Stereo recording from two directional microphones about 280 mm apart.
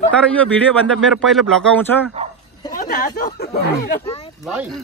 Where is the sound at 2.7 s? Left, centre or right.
Left.